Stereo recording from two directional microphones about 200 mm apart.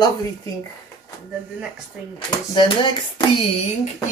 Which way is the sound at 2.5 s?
25° left (ahead or behind).